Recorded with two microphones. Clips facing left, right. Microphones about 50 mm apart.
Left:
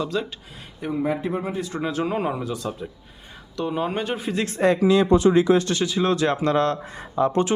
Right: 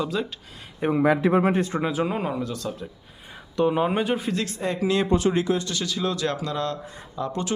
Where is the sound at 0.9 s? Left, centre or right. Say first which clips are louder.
Right 5 dB; right.